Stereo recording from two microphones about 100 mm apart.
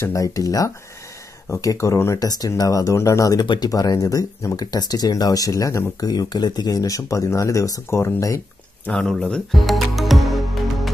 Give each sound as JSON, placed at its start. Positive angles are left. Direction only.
{"t": 0.0, "sound": "speech", "side_deg": 35}
{"t": 8.9, "sound": "music", "side_deg": 5}